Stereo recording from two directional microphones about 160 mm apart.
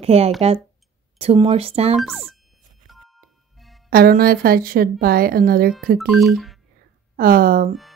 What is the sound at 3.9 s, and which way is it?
A woman's voice, 65° right (ahead or behind).